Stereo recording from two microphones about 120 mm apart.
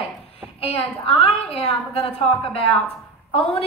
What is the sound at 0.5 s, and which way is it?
A woman's voice, 55° left (ahead or behind).